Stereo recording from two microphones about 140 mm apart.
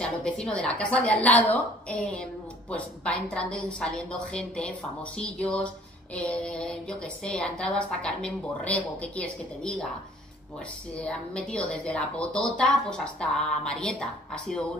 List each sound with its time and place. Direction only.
0.0 s a woman's voice: 5° left (ahead or behind)
11.1 s a woman's voice: 10° left (ahead or behind)